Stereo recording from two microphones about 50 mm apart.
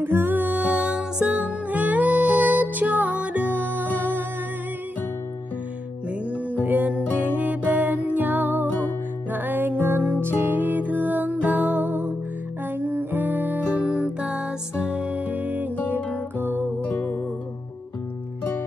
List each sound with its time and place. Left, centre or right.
0.0 s music: right
1.7 s music: right
6.6 s music: right
13.9 s music: right
16.8 s music: left